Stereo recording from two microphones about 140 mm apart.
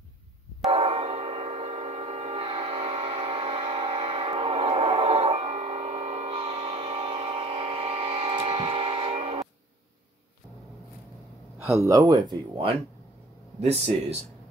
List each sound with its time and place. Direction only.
0.7 s a sound: 40° right (ahead or behind)
11.8 s speech: 25° right (ahead or behind)
13.6 s speech: 50° right (ahead or behind)